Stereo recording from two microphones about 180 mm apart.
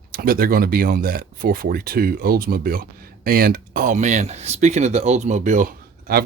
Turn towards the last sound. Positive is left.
turn(degrees=-55)  # may be behind; listen again after turning